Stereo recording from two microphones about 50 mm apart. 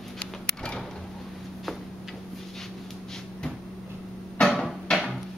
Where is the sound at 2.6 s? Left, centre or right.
Centre.